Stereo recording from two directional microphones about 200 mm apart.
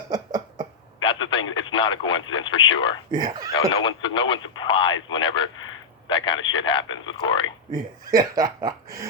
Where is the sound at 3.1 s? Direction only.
20° right (ahead or behind).